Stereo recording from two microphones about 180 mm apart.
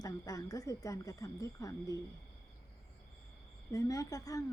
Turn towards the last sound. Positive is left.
turn(degrees=20)  # may be behind; listen again after turning